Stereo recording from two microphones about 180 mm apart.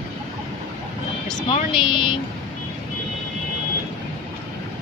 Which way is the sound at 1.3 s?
25° left (ahead or behind).